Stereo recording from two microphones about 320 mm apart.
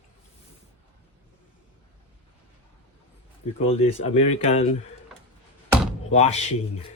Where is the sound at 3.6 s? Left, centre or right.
Centre.